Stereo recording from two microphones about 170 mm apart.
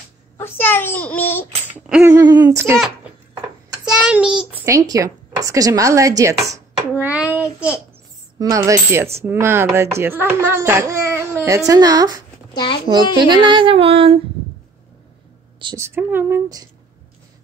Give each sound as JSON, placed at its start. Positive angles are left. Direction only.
{"t": 0.4, "sound": "a child's voice", "side_deg": 10}
{"t": 1.7, "sound": "a sound", "side_deg": -10}
{"t": 2.1, "sound": "tambourine", "side_deg": -25}
{"t": 3.8, "sound": "a child's voice", "side_deg": -5}
{"t": 8.4, "sound": "tambourine", "side_deg": -20}
{"t": 9.2, "sound": "a child's voice", "side_deg": -15}
{"t": 12.5, "sound": "a child's voice", "side_deg": 30}
{"t": 13.2, "sound": "speech", "side_deg": -30}
{"t": 15.6, "sound": "a child's voice", "side_deg": -15}